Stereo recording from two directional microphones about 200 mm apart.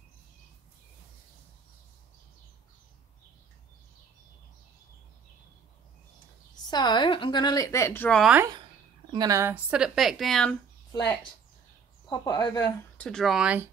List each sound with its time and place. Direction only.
6.5 s a woman's voice: 20° left (ahead or behind)
8.2 s speech: 5° right (ahead or behind)
9.1 s speech: 20° right (ahead or behind); by 10.5 s centre (ahead or behind)
10.9 s a woman's voice: 20° left (ahead or behind)
12.9 s speech: 5° left (ahead or behind)